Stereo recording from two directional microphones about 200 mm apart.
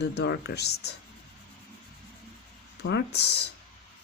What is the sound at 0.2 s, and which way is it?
Speech, 55° left (ahead or behind).